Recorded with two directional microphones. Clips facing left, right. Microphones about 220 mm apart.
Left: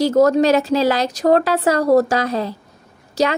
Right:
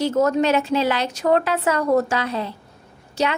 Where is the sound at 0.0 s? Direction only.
40° left (ahead or behind).